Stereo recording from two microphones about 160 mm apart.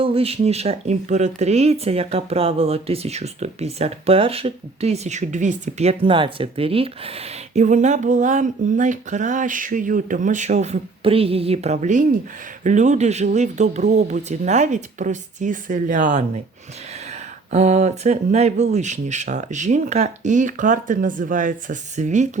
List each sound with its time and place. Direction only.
0.0 s speech: 35° right (ahead or behind)
7.5 s speech: 50° right (ahead or behind)
17.5 s speech: 45° right (ahead or behind)